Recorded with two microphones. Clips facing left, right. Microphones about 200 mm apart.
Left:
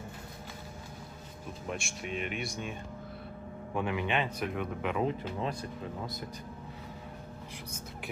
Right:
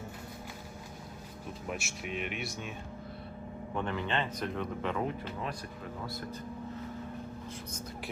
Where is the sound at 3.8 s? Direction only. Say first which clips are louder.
Left 2 dB; 10° left (ahead or behind).